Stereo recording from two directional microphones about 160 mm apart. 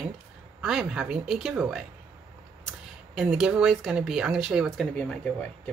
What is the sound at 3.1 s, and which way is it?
Speech, 5° right (ahead or behind).